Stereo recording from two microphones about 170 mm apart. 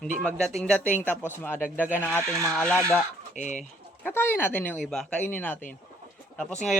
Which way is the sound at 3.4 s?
45° left (ahead or behind).